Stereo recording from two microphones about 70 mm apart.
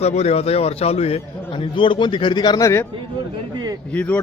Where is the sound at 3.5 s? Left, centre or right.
Right.